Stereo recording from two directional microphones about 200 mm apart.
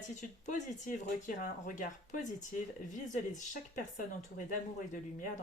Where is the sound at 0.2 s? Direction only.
35° left (ahead or behind).